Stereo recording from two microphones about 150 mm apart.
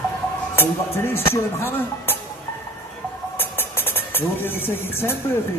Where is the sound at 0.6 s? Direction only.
15° left (ahead or behind).